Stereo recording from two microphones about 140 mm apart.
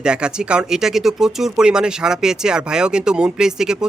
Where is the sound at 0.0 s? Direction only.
5° right (ahead or behind).